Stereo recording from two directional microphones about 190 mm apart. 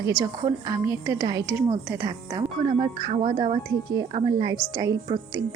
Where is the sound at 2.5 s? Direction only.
30° right (ahead or behind).